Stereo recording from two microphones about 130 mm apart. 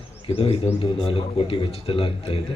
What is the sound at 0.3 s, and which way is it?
A man's voice, 50° left (ahead or behind).